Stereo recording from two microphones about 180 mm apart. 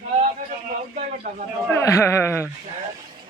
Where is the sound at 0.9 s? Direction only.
45° right (ahead or behind).